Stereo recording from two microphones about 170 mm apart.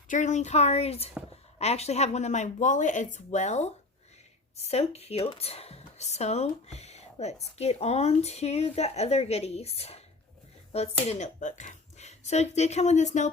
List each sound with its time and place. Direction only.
0.1 s speech: 45° left (ahead or behind)
11.0 s speech: 40° left (ahead or behind)